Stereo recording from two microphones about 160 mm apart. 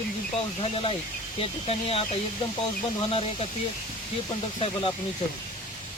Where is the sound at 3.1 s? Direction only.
35° left (ahead or behind).